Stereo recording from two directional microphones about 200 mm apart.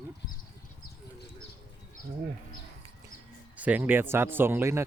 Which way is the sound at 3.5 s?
5° right (ahead or behind).